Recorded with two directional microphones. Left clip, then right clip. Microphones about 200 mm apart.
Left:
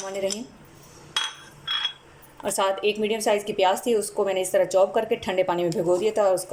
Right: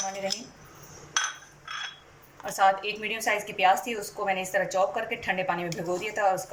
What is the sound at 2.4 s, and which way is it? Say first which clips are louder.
A woman's voice: even; 35° left (ahead or behind).